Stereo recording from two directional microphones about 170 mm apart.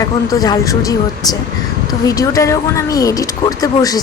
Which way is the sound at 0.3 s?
20° left (ahead or behind).